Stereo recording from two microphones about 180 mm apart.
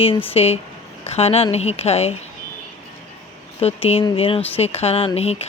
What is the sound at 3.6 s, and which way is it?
A woman's voice, 35° left (ahead or behind).